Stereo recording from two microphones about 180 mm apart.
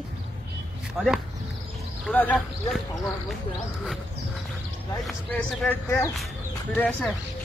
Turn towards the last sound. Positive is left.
turn(degrees=5)  # may be behind; listen again after turning